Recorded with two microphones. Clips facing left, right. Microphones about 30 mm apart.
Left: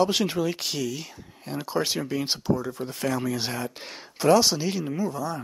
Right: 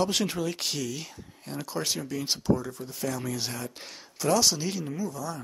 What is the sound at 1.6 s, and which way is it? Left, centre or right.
Speech, left.